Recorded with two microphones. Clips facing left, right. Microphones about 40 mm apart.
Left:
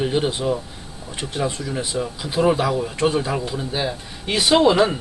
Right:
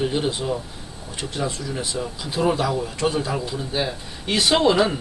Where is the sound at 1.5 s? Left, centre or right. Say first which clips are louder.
Left 2 dB; centre.